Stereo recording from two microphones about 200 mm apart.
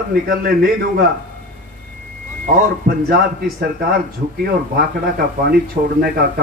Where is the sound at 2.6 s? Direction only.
50° right (ahead or behind).